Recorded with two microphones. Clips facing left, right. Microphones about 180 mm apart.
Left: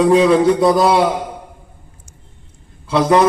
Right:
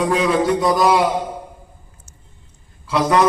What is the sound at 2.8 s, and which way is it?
Speech, 25° left (ahead or behind).